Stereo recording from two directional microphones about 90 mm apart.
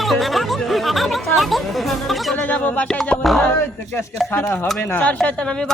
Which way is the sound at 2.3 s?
15° left (ahead or behind).